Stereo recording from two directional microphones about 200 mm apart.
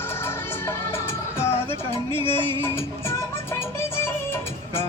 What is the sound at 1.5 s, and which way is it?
Music, 30° left (ahead or behind).